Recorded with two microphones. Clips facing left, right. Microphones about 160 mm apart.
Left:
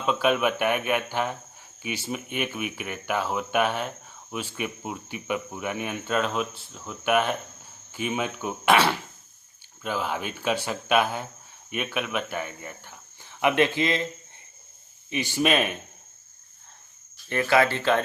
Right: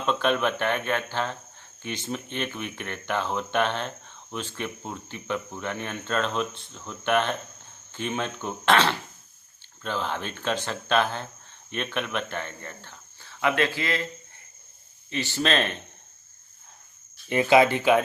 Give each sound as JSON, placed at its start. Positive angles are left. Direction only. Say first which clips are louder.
{"t": 0.0, "sound": "speech", "louder": "left 1 dB", "side_deg": 5}
{"t": 15.1, "sound": "speech", "louder": "left 2 dB", "side_deg": 15}
{"t": 17.2, "sound": "speech", "louder": "right 3 dB", "side_deg": -15}